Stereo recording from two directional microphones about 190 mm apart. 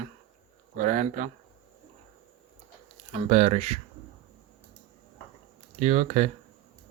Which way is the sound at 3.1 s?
40° right (ahead or behind).